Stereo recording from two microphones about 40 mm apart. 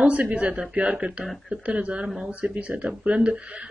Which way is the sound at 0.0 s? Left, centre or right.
Right.